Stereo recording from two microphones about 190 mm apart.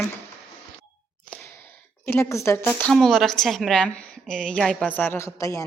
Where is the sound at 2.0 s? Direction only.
15° left (ahead or behind).